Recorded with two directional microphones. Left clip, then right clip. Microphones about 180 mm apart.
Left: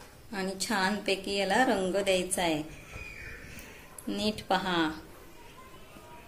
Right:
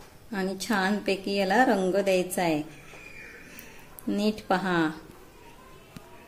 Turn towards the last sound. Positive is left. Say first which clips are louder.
# right 2 dB
turn(degrees=-45)  # may be behind; listen again after turning